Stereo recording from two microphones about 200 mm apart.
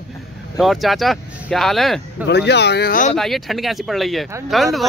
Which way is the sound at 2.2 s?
55° left (ahead or behind).